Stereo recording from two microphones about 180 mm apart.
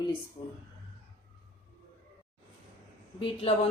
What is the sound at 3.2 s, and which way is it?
Speech, 30° left (ahead or behind).